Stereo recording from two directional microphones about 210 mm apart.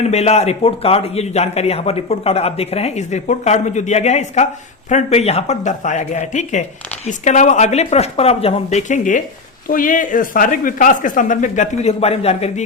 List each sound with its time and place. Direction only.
0.0 s a man's voice: 30° left (ahead or behind)